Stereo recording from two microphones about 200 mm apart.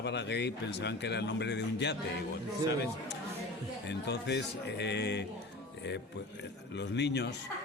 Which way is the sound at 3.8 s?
60° left (ahead or behind).